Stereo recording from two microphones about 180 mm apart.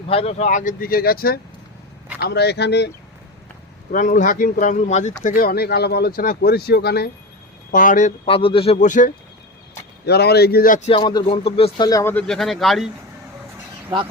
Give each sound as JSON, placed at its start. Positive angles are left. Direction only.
{"t": 0.1, "sound": "speech", "side_deg": 35}
{"t": 2.2, "sound": "speech", "side_deg": 65}
{"t": 3.9, "sound": "speech", "side_deg": 45}
{"t": 5.2, "sound": "speech", "side_deg": 55}
{"t": 7.7, "sound": "speech", "side_deg": 45}
{"t": 10.1, "sound": "speech", "side_deg": 65}
{"t": 10.8, "sound": "speech", "side_deg": 30}
{"t": 11.9, "sound": "speech", "side_deg": 20}
{"t": 12.1, "sound": "speech", "side_deg": 0}